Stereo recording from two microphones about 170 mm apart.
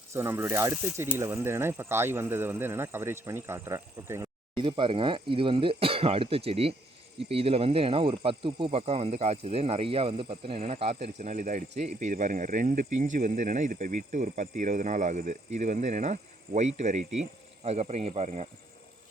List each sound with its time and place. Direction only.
0.1 s speech: 15° right (ahead or behind)
4.5 s speech: 30° right (ahead or behind)
11.2 s speech: 50° right (ahead or behind)